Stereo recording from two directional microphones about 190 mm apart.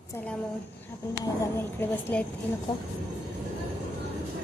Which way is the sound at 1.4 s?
10° left (ahead or behind).